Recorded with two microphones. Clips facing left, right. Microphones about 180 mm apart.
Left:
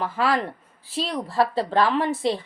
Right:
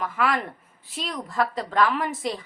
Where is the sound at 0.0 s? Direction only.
30° left (ahead or behind).